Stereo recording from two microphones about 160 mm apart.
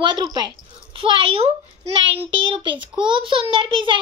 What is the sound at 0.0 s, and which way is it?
A child's voice, 30° right (ahead or behind).